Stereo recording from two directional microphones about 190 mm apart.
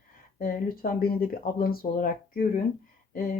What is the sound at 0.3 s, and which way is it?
Speech, 50° left (ahead or behind).